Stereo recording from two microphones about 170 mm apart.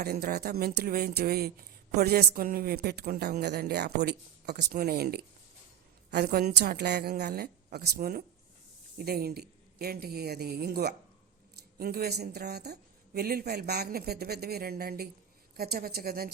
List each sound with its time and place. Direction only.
0.0 s a woman's voice: 65° right (ahead or behind)